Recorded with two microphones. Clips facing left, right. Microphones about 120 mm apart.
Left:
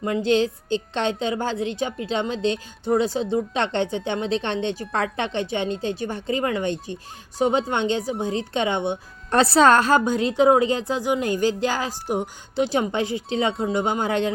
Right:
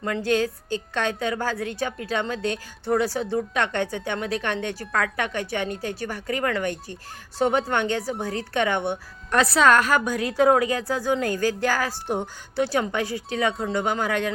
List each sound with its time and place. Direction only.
0.0 s a woman's voice: 20° left (ahead or behind)
9.3 s a woman's voice: 30° left (ahead or behind)
12.0 s speech: 5° left (ahead or behind)
12.5 s a woman's voice: 20° left (ahead or behind)